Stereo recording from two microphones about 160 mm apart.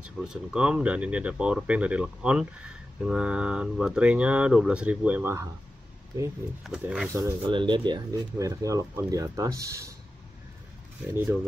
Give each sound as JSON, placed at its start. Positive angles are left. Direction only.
{"t": 0.0, "sound": "speech", "side_deg": -5}
{"t": 6.6, "sound": "speech", "side_deg": -5}
{"t": 7.1, "sound": "speech", "side_deg": -20}
{"t": 7.4, "sound": "speech", "side_deg": -30}